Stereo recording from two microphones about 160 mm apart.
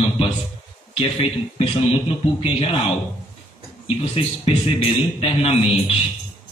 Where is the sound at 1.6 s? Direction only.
35° left (ahead or behind).